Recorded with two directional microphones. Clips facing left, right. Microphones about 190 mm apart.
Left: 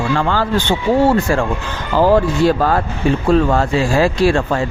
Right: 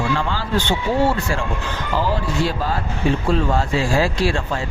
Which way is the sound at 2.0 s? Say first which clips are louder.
Left 12 dB; 50° left (ahead or behind).